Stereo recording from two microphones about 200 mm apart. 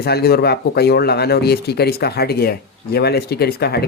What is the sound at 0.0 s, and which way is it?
Speech, 50° left (ahead or behind).